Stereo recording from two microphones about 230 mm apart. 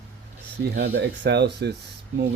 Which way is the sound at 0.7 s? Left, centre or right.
Right.